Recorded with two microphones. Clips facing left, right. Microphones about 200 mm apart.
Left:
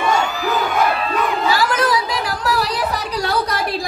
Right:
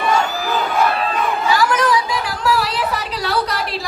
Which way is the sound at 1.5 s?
35° left (ahead or behind).